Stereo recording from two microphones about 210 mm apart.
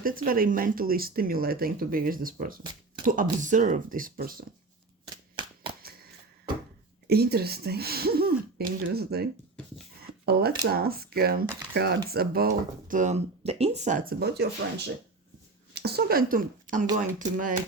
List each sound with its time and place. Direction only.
0.0 s speech: 45° right (ahead or behind)
5.0 s shuffling cards: 20° right (ahead or behind)
7.1 s speech: 50° right (ahead or behind)
10.6 s speech: 45° right (ahead or behind)
12.9 s speech: 35° right (ahead or behind)
15.7 s a woman's voice: 50° right (ahead or behind)